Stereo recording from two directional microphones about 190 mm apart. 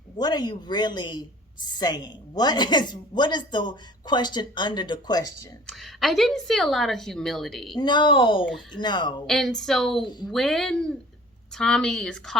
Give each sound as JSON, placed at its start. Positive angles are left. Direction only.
{"t": 0.2, "sound": "a woman's voice", "side_deg": 20}
{"t": 5.6, "sound": "a woman's voice", "side_deg": 0}
{"t": 7.8, "sound": "a woman's voice", "side_deg": 25}
{"t": 9.2, "sound": "a woman's voice", "side_deg": 0}